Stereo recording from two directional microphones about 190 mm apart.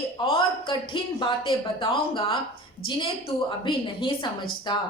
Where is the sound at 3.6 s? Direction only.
25° left (ahead or behind).